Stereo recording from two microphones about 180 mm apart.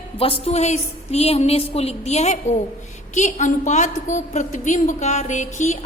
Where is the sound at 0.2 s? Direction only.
30° left (ahead or behind).